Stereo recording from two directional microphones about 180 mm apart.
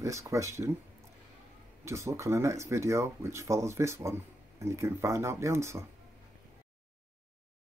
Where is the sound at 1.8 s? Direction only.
15° right (ahead or behind).